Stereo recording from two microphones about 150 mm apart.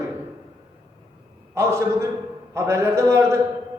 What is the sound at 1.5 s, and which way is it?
A man's voice, 20° right (ahead or behind).